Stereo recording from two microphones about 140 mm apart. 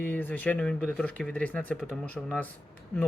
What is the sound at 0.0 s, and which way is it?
Speech, 10° left (ahead or behind).